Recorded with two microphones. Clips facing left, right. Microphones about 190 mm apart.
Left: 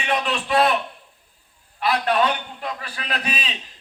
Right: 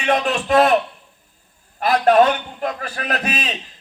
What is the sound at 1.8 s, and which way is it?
A man's voice, 45° right (ahead or behind).